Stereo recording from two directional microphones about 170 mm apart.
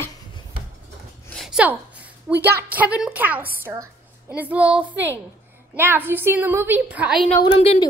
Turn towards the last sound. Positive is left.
turn(degrees=35)  # may be behind; listen again after turning